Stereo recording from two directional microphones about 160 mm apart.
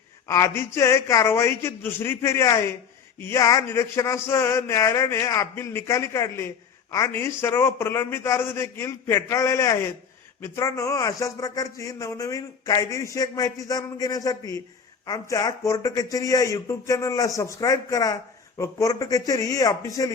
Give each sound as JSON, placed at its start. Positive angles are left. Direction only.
{"t": 0.3, "sound": "a man's voice", "side_deg": 20}